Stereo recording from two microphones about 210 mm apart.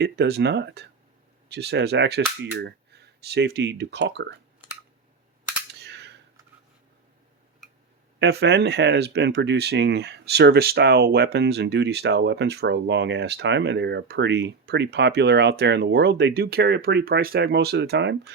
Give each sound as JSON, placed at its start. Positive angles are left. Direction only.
{"t": 0.0, "sound": "speech", "side_deg": -50}
{"t": 5.8, "sound": "cap gun", "side_deg": -55}
{"t": 8.2, "sound": "speech", "side_deg": -55}